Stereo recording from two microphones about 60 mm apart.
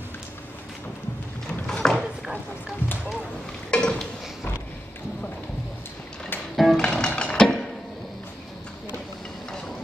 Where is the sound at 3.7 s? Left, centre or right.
Centre.